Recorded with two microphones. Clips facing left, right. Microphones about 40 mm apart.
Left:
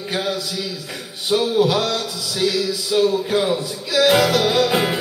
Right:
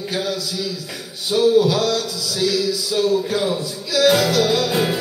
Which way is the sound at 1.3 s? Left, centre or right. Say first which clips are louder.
Right 2 dB; left.